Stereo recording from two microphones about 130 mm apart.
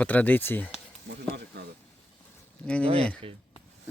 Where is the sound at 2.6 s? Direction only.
10° left (ahead or behind).